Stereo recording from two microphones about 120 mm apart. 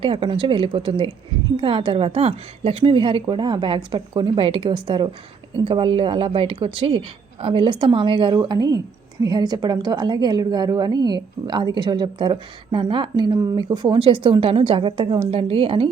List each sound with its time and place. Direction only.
0.0 s a woman's voice: 50° right (ahead or behind)